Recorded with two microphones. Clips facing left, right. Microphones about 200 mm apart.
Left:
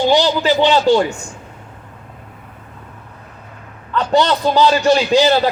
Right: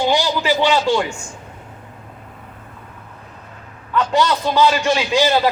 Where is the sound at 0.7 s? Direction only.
35° left (ahead or behind).